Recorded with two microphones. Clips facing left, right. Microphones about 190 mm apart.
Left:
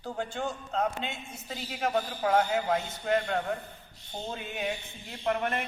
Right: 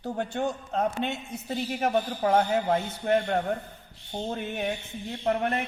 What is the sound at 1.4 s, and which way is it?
Speech, 40° right (ahead or behind).